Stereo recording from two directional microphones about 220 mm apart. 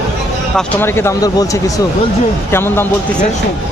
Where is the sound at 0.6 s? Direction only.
10° left (ahead or behind).